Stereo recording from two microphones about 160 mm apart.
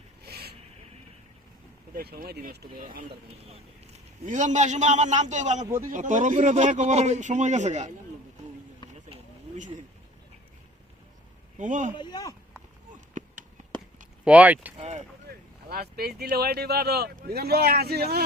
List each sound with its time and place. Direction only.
0.2 s a sound: 90° right
2.0 s speech: 70° right (ahead or behind)
4.3 s speech: 50° right (ahead or behind)
11.5 s speech: 50° right (ahead or behind)
11.9 s speech: 25° left (ahead or behind)
13.2 s a sound: 50° right (ahead or behind)
14.3 s speech: 10° right (ahead or behind)
14.8 s a sound: 45° right (ahead or behind)
15.7 s speech: 75° right (ahead or behind)